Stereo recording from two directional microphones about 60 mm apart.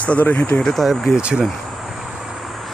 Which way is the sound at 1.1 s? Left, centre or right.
Centre.